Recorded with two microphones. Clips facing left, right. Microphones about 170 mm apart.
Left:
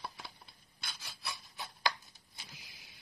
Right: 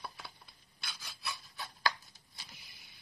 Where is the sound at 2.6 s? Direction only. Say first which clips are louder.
Left 2 dB; 90° left.